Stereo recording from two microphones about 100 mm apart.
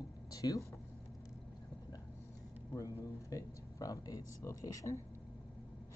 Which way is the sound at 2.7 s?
35° left (ahead or behind).